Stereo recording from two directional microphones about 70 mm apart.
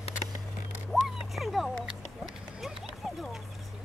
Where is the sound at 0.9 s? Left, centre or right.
Centre.